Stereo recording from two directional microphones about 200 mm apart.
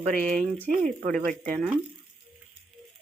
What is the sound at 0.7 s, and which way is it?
Speech, 40° right (ahead or behind).